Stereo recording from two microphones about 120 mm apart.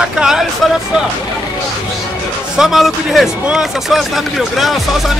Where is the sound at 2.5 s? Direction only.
5° right (ahead or behind).